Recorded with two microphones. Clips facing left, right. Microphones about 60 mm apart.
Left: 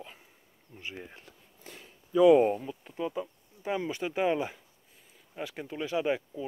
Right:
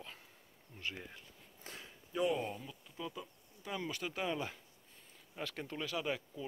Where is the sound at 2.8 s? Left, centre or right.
Left.